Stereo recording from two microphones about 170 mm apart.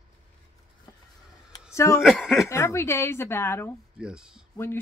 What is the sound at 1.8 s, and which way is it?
Speech, 15° left (ahead or behind).